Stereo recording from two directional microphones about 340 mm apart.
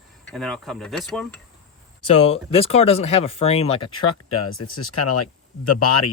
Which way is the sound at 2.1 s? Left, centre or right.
Centre.